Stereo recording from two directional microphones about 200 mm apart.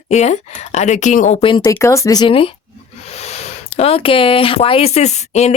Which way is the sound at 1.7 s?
15° left (ahead or behind).